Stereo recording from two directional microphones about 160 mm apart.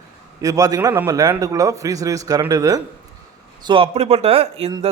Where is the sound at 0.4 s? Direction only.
20° right (ahead or behind).